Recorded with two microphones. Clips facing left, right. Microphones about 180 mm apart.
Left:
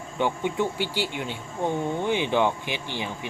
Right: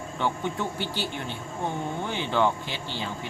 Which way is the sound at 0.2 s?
15° left (ahead or behind).